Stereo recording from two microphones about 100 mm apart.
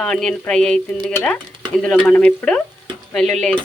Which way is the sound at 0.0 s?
5° left (ahead or behind).